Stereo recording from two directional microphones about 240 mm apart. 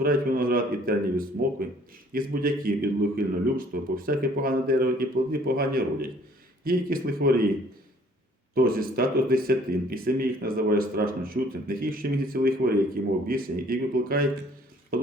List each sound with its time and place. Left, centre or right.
0.0 s speech: right
8.5 s speech: right